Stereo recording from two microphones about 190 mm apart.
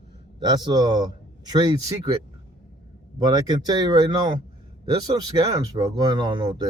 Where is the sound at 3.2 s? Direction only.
20° right (ahead or behind).